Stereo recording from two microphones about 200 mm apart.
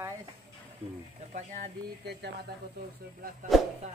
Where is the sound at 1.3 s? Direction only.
40° right (ahead or behind).